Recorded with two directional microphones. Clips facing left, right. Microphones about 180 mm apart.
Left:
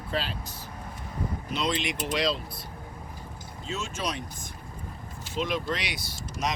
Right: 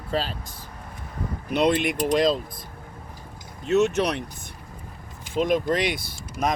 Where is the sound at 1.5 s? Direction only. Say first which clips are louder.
Right 9 dB; 60° right (ahead or behind).